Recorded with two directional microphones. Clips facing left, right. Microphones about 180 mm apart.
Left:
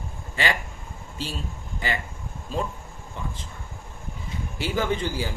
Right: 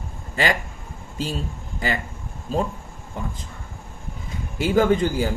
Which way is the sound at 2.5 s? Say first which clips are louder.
Right 5 dB; 45° right (ahead or behind).